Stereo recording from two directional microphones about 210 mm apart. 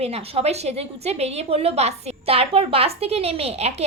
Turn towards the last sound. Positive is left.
turn(degrees=-30)  # may be behind; listen again after turning